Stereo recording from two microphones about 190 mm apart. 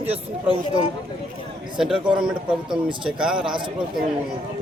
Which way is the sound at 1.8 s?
5° right (ahead or behind).